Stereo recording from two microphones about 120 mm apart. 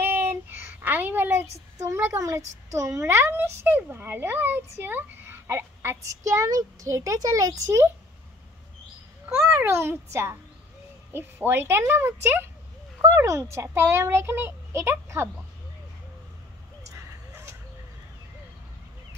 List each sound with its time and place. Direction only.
0.0 s child singing: 20° right (ahead or behind)
1.8 s a woman's voice: 20° right (ahead or behind)
9.3 s a child's voice: 15° right (ahead or behind)
11.1 s a woman's voice: 20° right (ahead or behind)
16.9 s a sound: 25° right (ahead or behind)